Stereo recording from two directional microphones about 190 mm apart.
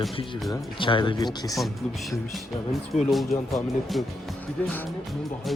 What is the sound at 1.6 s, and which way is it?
Speech, centre (ahead or behind).